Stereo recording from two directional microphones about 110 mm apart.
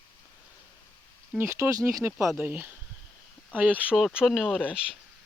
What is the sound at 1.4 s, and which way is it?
Speech, 25° right (ahead or behind).